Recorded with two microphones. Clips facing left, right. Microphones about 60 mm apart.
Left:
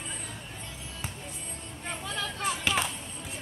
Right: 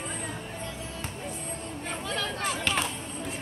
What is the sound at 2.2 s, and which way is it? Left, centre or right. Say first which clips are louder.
Chop: left 2 dB; right.